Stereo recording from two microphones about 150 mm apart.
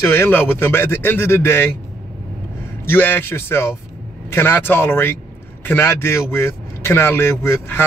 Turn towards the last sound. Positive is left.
turn(degrees=15)  # may be behind; listen again after turning